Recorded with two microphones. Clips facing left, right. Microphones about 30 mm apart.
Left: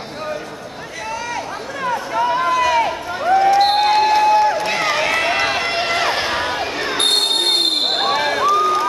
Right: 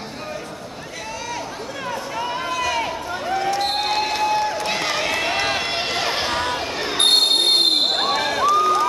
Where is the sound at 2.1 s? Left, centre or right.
Centre.